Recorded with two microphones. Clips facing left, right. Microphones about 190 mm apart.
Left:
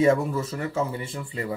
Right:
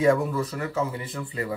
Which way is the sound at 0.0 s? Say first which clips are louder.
Left 1 dB; 25° left (ahead or behind).